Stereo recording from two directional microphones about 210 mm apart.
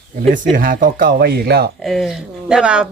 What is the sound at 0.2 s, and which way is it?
Speech, 40° right (ahead or behind).